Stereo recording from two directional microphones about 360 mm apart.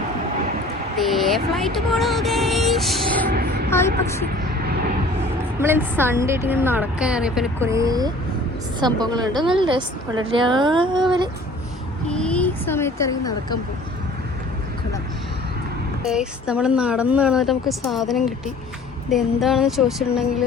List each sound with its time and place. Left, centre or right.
0.9 s speech: centre
3.2 s vehicle: right
3.7 s speech: centre
5.5 s a woman's voice: centre
12.0 s speech: centre
16.0 s a woman's voice: centre